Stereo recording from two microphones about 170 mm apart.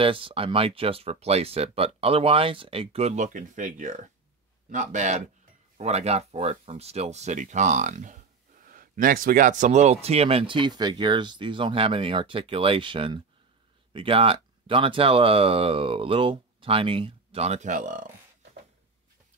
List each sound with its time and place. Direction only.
0.0 s speech: 30° right (ahead or behind)
3.3 s speech: 50° right (ahead or behind)